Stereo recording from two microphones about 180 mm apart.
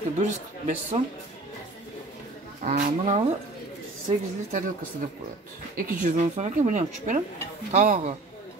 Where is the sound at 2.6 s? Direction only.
45° right (ahead or behind).